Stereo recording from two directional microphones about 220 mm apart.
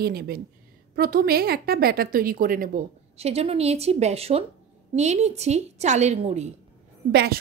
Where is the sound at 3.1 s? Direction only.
30° right (ahead or behind).